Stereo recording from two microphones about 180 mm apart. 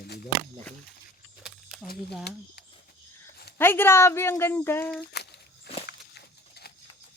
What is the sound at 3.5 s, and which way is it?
Speech, 10° left (ahead or behind).